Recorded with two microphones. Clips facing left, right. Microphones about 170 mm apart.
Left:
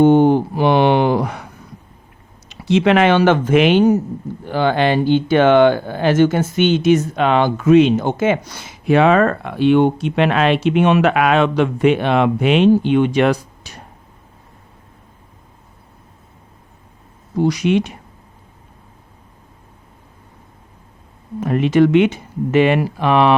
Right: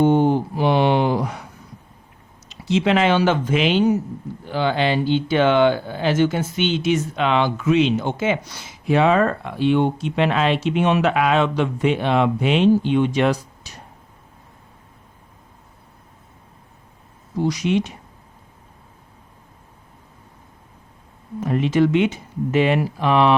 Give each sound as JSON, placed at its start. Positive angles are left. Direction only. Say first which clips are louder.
{"t": 0.0, "sound": "a sound", "louder": "left 5 dB", "side_deg": 65}
{"t": 2.5, "sound": "speech", "louder": "left 5 dB", "side_deg": 60}
{"t": 17.3, "sound": "speech", "louder": "left 4 dB", "side_deg": 60}
{"t": 21.4, "sound": "speech", "louder": "left 4 dB", "side_deg": 65}